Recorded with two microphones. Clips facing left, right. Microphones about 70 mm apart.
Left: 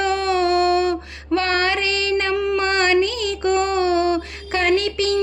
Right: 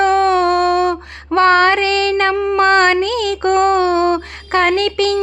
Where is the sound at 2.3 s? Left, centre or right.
Right.